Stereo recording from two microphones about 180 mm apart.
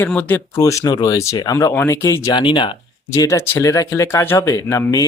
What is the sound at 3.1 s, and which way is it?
Speech, 15° left (ahead or behind).